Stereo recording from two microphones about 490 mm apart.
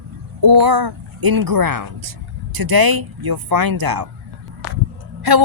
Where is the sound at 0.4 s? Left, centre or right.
Right.